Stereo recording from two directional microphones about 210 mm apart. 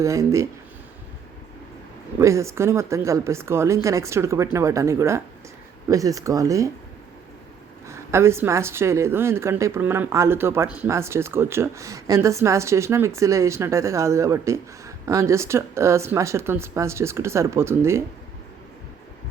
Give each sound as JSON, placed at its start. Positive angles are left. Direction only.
{"t": 0.0, "sound": "a woman's voice", "side_deg": -15}
{"t": 2.1, "sound": "a woman's voice", "side_deg": -15}
{"t": 7.9, "sound": "a woman's voice", "side_deg": -15}